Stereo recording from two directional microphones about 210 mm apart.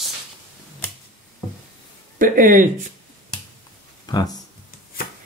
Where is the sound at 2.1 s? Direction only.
40° right (ahead or behind).